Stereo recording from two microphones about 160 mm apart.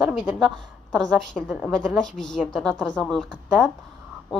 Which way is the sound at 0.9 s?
5° left (ahead or behind).